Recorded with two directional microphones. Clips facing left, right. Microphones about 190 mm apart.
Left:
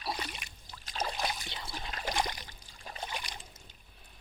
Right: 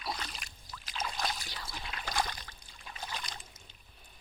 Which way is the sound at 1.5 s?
25° left (ahead or behind).